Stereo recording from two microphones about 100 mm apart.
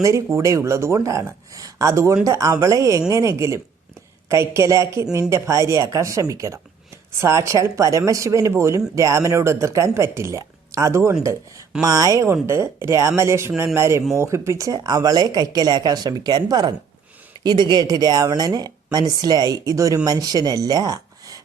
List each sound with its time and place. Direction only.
0.0 s a woman's voice: 30° right (ahead or behind)